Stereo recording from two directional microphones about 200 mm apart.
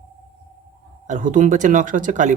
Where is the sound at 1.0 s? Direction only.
40° right (ahead or behind).